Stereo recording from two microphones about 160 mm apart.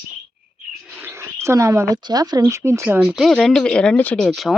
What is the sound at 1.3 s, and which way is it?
Speech, 15° right (ahead or behind).